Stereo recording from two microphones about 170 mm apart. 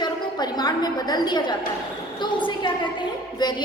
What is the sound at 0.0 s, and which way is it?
A woman's voice, 25° left (ahead or behind).